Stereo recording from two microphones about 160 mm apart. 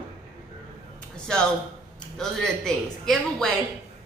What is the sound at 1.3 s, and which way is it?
A man's voice, 5° left (ahead or behind).